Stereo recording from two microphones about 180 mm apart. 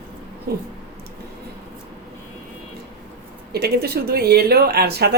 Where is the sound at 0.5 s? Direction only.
60° right (ahead or behind).